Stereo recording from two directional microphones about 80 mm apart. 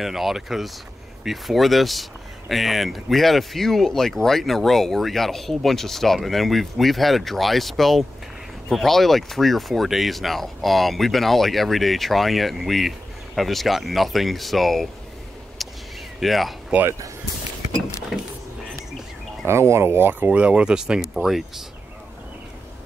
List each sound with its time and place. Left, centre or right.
0.0 s speech: centre
16.2 s speech: centre
18.1 s speech: centre
19.4 s speech: right
20.2 s speech: centre